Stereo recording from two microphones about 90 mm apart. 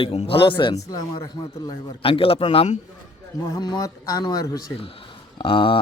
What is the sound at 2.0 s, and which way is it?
Speech, 90° left.